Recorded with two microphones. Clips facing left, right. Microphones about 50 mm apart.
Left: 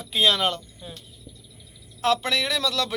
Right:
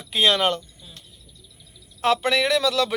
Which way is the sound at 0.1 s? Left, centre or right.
Centre.